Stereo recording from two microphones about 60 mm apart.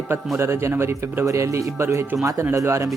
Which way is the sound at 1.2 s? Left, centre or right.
Right.